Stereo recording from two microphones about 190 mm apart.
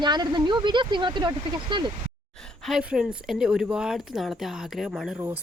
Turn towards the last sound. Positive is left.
turn(degrees=0)  # may be behind; listen again after turning